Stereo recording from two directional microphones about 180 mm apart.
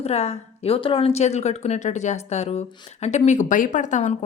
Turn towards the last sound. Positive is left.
turn(degrees=40)  # may be behind; listen again after turning